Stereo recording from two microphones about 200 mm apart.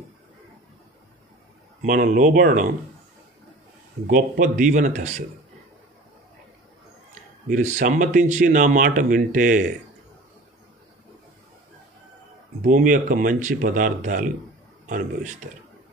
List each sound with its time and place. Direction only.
1.8 s speech: 40° right (ahead or behind)
4.1 s speech: 40° right (ahead or behind)
7.4 s speech: 40° right (ahead or behind)
12.6 s speech: 40° right (ahead or behind)